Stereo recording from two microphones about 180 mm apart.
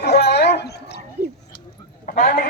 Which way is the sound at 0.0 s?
65° left (ahead or behind).